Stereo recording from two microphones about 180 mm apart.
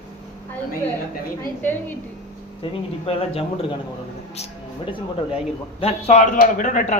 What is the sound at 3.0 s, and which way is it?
Speech, 30° left (ahead or behind).